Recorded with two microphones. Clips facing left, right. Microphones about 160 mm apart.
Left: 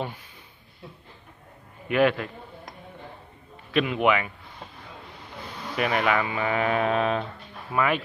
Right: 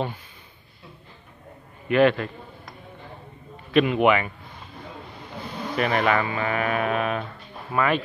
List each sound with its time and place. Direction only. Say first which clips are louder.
1.9 s a man's voice: right 3 dB; 10° left (ahead or behind)
3.7 s speech: right 4 dB; centre (ahead or behind)
5.8 s speech: right 2 dB; 5° left (ahead or behind); by 7.2 s 25° left (ahead or behind)
7.7 s a man's voice: right 2 dB; 10° left (ahead or behind)